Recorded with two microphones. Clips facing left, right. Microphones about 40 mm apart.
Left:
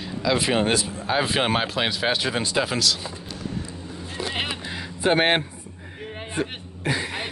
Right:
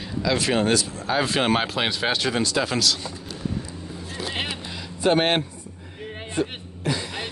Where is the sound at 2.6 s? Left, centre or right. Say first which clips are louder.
Even; centre.